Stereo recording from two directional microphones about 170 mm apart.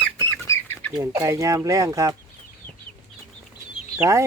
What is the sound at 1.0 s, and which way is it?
Speech, 15° right (ahead or behind).